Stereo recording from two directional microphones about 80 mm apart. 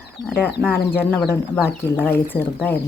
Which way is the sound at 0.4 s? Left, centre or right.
Left.